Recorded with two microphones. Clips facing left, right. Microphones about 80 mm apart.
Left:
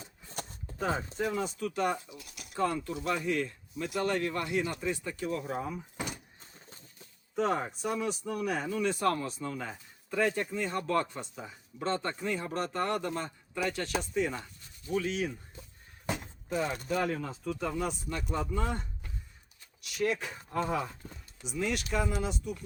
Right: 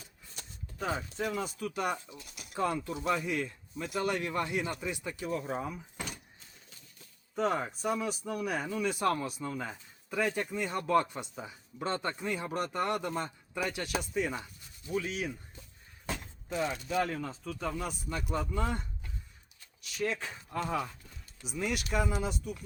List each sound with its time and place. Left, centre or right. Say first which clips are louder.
0.9 s speech: left 2 dB; left
1.4 s speech: left 3 dB; centre
6.4 s a sound: left 4 dB; left
7.3 s speech: left 1 dB; centre
16.0 s a sound: left 3 dB; centre
16.5 s speech: left 1 dB; centre
21.0 s speech: left 7 dB; left
21.4 s speech: left 2 dB; centre